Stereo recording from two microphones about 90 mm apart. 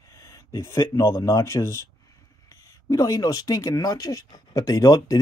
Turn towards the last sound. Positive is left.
turn(degrees=45)  # may be behind; listen again after turning